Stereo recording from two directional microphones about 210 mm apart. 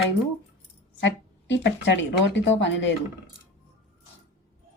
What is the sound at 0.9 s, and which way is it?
Speech, 60° left (ahead or behind).